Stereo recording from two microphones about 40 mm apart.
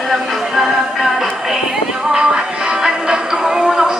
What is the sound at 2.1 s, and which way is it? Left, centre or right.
Music, right.